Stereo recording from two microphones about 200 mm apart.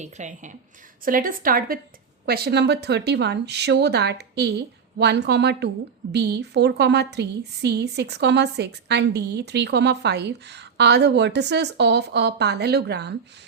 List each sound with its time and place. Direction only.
0.0 s a woman's voice: 35° right (ahead or behind); by 13.1 s 55° right (ahead or behind)